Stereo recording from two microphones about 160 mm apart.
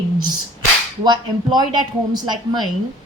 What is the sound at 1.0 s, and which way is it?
Speech, 25° right (ahead or behind).